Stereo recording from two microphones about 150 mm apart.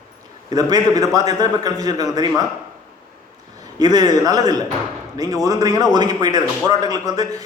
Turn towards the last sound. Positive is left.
turn(degrees=-25)  # may be behind; listen again after turning